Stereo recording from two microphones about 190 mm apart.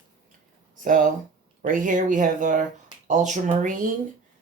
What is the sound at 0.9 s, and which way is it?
Speech, 45° right (ahead or behind).